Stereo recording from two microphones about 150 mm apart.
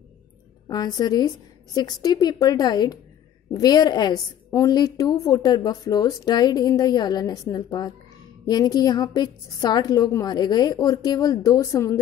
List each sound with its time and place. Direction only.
0.7 s a woman's voice: 25° left (ahead or behind)